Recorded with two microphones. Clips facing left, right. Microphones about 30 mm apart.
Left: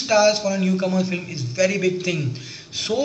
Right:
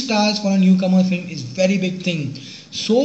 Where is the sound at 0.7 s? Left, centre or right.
Right.